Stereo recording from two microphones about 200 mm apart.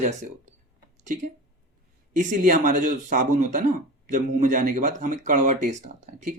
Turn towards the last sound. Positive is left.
turn(degrees=-35)  # may be behind; listen again after turning